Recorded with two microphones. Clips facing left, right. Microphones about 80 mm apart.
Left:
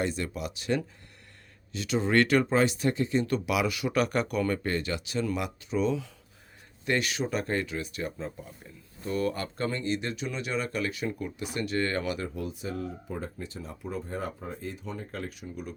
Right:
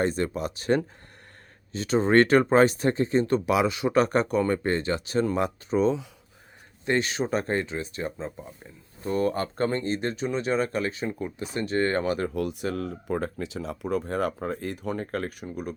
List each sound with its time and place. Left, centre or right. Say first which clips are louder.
0.0 s speech: right 5 dB; right
12.3 s speech: right 6 dB; right